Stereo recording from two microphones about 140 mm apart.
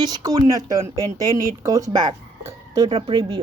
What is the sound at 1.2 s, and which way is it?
Speech, 25° right (ahead or behind).